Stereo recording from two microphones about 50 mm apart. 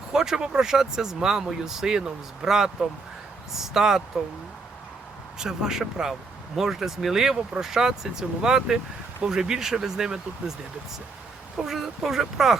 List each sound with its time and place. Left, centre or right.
0.1 s speech: centre
5.4 s speech: centre
11.5 s speech: centre